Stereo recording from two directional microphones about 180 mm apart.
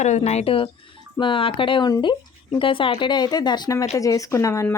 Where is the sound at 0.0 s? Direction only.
40° left (ahead or behind).